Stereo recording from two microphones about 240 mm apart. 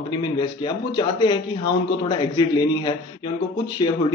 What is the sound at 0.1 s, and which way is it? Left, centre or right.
A man's voice, centre.